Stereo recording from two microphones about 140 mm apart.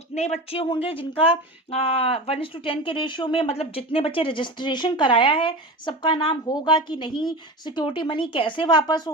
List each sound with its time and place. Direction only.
0.1 s speech: 50° left (ahead or behind)
0.6 s speech: 35° left (ahead or behind)